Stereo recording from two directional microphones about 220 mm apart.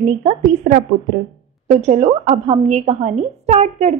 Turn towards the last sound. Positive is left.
turn(degrees=-30)  # may be behind; listen again after turning